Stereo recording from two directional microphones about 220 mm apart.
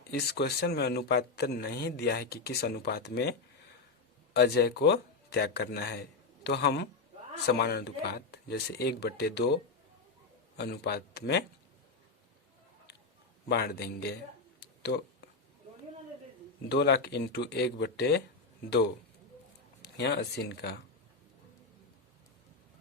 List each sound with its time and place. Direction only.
0.1 s speech: 45° left (ahead or behind)
4.4 s speech: 45° left (ahead or behind)
10.6 s speech: 45° left (ahead or behind)
13.5 s speech: 45° left (ahead or behind)
16.6 s speech: 50° left (ahead or behind)
19.8 s speech: 50° left (ahead or behind)